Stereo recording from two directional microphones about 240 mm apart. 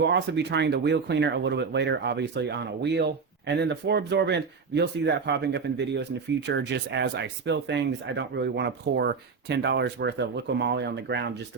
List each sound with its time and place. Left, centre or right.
0.0 s speech: right